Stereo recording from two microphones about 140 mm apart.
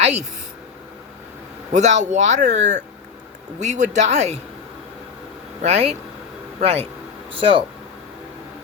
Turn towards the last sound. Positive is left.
turn(degrees=-40)  # may be behind; listen again after turning